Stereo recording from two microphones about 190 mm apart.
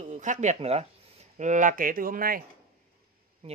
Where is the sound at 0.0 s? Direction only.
40° right (ahead or behind).